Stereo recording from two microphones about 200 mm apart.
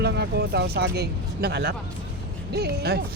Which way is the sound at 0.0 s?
55° right (ahead or behind).